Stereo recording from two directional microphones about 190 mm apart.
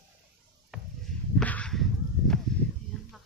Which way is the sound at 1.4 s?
5° left (ahead or behind).